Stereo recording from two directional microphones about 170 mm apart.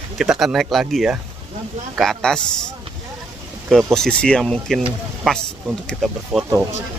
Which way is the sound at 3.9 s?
5° left (ahead or behind).